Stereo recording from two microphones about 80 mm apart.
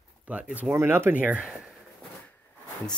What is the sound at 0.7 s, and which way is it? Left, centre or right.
Speech, right.